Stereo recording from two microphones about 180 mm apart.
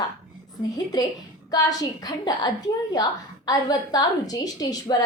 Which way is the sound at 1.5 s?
20° left (ahead or behind).